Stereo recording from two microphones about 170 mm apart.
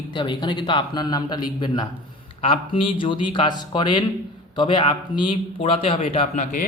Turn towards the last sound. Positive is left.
turn(degrees=55)  # may be behind; listen again after turning